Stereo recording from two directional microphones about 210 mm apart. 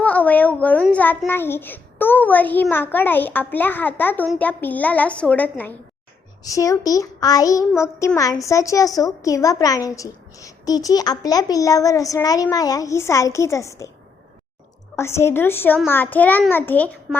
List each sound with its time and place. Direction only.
0.0 s a woman's voice: 5° left (ahead or behind)
14.9 s a woman's voice: 10° left (ahead or behind)